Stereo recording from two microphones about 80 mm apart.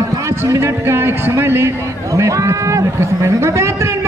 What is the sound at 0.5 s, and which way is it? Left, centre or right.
A man's voice, right.